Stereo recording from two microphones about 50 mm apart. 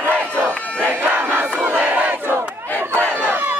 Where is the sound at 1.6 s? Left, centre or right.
Right.